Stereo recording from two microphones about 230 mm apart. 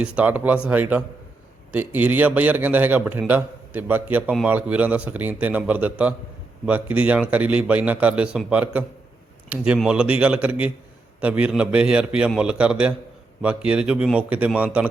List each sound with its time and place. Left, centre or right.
0.2 s a man's voice: centre